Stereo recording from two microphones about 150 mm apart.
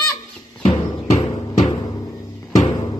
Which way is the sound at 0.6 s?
45° left (ahead or behind).